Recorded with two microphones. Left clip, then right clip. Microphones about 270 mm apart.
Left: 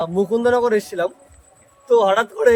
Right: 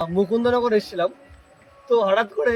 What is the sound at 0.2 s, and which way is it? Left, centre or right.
Speech, left.